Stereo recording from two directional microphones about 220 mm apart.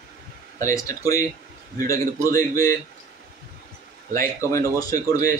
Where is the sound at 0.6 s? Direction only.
15° left (ahead or behind).